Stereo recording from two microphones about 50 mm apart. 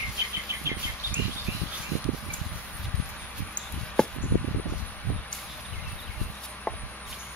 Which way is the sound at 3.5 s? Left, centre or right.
Centre.